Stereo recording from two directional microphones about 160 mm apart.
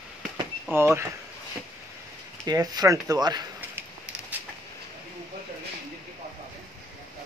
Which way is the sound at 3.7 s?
10° right (ahead or behind).